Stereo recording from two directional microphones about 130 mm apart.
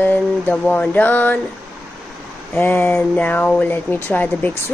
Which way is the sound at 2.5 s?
15° left (ahead or behind).